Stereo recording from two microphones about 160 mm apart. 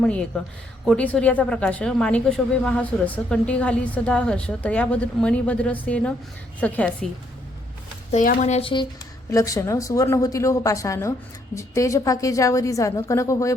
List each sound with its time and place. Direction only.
0.0 s speech: 5° left (ahead or behind)
8.1 s speech: 55° left (ahead or behind)
8.6 s a woman's voice: 30° left (ahead or behind)